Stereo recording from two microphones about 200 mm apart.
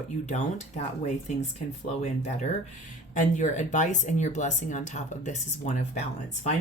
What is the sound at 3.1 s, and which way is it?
Speech, 40° left (ahead or behind).